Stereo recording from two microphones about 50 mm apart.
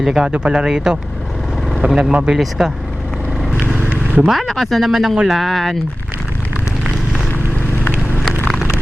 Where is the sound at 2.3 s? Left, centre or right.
Centre.